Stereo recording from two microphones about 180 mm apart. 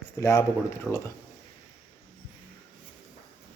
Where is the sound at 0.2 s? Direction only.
15° left (ahead or behind).